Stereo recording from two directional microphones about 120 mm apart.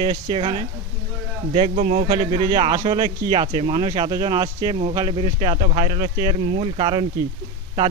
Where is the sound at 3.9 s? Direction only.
35° right (ahead or behind).